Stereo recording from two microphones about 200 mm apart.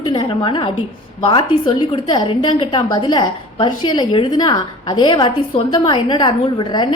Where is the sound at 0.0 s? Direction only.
25° left (ahead or behind).